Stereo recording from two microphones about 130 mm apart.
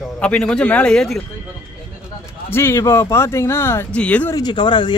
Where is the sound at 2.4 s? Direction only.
20° left (ahead or behind).